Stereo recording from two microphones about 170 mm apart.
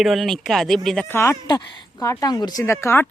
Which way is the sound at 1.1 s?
15° left (ahead or behind).